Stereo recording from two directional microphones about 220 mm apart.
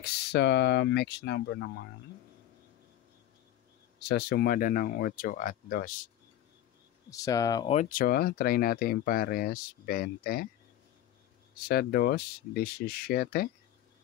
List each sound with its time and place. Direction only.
0.0 s speech: 50° left (ahead or behind)
4.0 s speech: 50° left (ahead or behind)
7.1 s speech: 15° left (ahead or behind)
7.7 s speech: 35° left (ahead or behind)
11.5 s speech: 45° left (ahead or behind)